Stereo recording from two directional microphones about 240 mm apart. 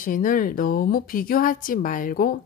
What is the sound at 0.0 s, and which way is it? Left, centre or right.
Speech, left.